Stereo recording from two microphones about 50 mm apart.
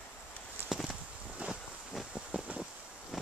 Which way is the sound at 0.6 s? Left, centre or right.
Centre.